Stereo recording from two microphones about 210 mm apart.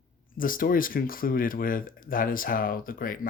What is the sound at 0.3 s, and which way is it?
Speech, 40° left (ahead or behind).